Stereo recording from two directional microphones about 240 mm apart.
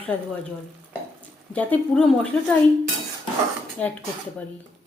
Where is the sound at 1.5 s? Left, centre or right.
Centre.